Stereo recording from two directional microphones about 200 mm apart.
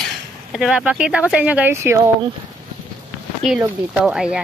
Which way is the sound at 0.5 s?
5° right (ahead or behind).